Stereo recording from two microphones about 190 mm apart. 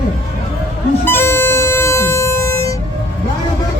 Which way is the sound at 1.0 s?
10° left (ahead or behind).